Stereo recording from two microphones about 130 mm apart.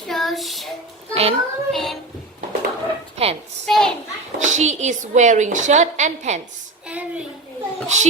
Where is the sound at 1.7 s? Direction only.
Centre (ahead or behind).